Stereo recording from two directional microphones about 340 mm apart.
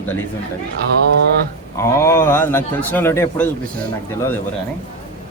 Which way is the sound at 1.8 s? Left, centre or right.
Centre.